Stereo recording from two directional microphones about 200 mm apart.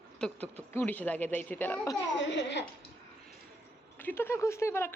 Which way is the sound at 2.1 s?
60° left (ahead or behind).